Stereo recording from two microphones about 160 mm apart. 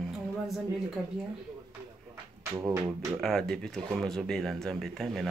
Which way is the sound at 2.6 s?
15° right (ahead or behind).